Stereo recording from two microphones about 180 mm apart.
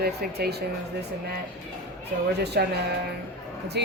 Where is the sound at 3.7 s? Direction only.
65° right (ahead or behind).